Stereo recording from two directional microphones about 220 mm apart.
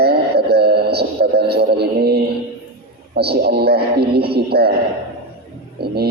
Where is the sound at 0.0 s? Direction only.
45° right (ahead or behind).